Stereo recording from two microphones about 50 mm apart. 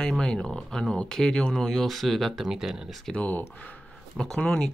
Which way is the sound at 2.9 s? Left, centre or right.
Centre.